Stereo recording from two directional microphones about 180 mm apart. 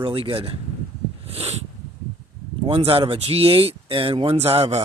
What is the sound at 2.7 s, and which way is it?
Speech, 30° right (ahead or behind).